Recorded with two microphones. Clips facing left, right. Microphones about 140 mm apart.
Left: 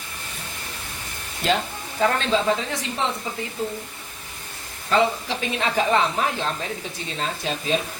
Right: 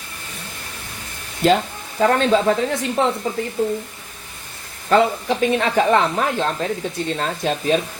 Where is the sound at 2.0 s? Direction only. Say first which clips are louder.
Right 5 dB; 45° right (ahead or behind).